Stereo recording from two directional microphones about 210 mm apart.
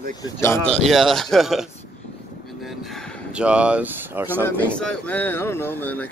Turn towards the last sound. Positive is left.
turn(degrees=10)  # may be behind; listen again after turning